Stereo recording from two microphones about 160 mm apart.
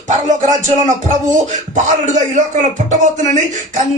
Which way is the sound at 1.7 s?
50° right (ahead or behind).